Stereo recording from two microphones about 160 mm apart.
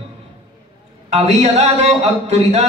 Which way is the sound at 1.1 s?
45° right (ahead or behind).